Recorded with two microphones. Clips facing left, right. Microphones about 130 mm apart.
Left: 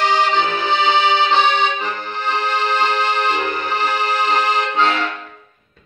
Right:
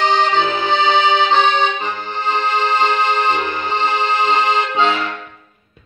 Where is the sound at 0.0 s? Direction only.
20° right (ahead or behind).